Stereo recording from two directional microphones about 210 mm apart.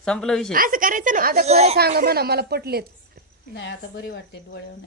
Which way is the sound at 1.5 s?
30° right (ahead or behind).